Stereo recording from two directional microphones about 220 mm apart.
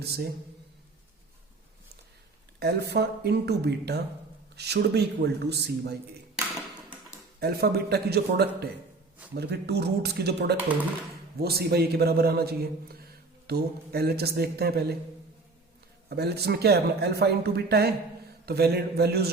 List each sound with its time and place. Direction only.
0.0 s a man's voice: 45° right (ahead or behind)
2.6 s a man's voice: 50° right (ahead or behind)
7.3 s a man's voice: 45° right (ahead or behind)
16.0 s a man's voice: 45° right (ahead or behind)